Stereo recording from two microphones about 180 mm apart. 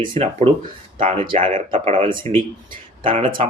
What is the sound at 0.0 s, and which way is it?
Speech, 30° right (ahead or behind).